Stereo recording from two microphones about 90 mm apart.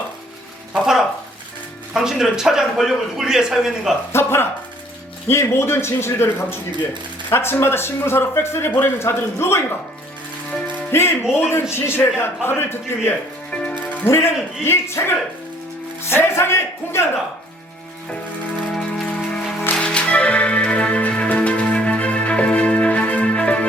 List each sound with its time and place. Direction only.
0.7 s a sound: 5° right (ahead or behind)
1.9 s a man's voice: 5° right (ahead or behind)
4.1 s a man's voice: 25° left (ahead or behind)
10.9 s a man's voice: 25° left (ahead or behind)
13.5 s music: 10° left (ahead or behind)
13.7 s a man's voice: 25° left (ahead or behind)
18.7 s music: 5° left (ahead or behind)